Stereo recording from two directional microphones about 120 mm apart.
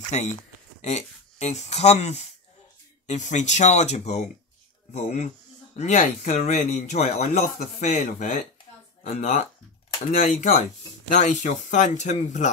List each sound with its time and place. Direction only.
0.1 s speech: 85° left
0.8 s speech: 70° left (ahead or behind)
3.1 s speech: 90° left; by 7.6 s 70° left (ahead or behind)
7.8 s speech: 85° left